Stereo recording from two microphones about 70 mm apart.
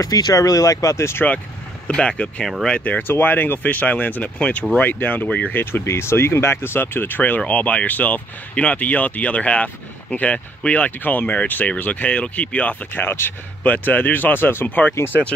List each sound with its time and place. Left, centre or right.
0.0 s speech: left
1.9 s speech: centre
5.9 s speech: left